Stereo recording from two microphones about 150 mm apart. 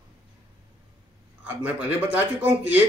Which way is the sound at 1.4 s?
10° right (ahead or behind).